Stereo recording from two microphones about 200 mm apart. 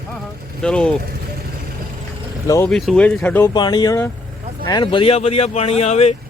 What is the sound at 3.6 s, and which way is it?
Speech, 20° left (ahead or behind).